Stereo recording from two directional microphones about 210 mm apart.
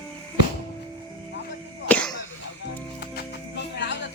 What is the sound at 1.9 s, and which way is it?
Cough, 5° left (ahead or behind).